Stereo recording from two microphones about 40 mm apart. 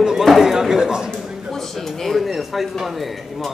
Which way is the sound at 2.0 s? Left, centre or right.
Centre.